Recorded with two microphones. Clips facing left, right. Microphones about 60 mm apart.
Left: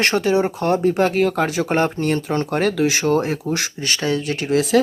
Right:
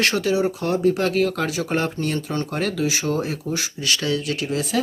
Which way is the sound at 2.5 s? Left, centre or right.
Left.